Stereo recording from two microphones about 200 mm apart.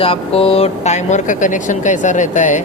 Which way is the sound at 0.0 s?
30° left (ahead or behind).